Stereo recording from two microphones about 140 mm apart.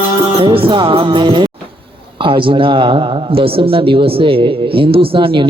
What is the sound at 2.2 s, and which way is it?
A man's voice, 35° right (ahead or behind).